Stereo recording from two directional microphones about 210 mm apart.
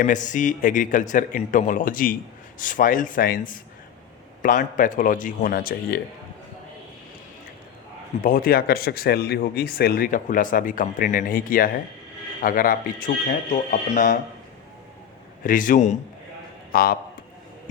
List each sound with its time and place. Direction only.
0.0 s a man's voice: 35° left (ahead or behind)
8.2 s a man's voice: 45° left (ahead or behind)
15.4 s a man's voice: 40° left (ahead or behind)